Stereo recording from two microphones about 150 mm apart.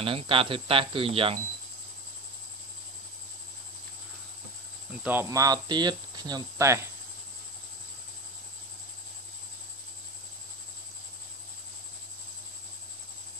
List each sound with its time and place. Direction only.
0.0 s speech: 35° right (ahead or behind)
5.0 s speech: 15° right (ahead or behind)